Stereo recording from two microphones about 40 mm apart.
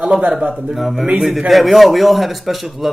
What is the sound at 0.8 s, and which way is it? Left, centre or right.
Speech, centre.